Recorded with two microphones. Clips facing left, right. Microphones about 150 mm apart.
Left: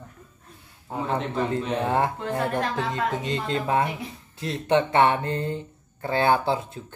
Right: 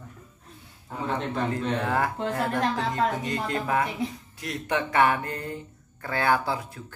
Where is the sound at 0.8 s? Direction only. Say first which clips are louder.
Left 2 dB; 30° left (ahead or behind).